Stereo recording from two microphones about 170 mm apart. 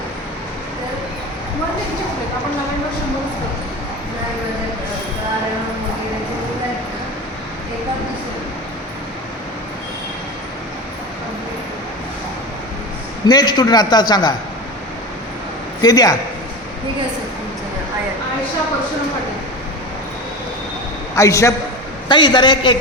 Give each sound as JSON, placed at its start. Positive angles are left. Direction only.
{"t": 13.2, "sound": "a man's voice", "side_deg": 25}
{"t": 15.8, "sound": "a man's voice", "side_deg": 20}
{"t": 21.2, "sound": "a man's voice", "side_deg": 20}
{"t": 22.1, "sound": "a man's voice", "side_deg": 30}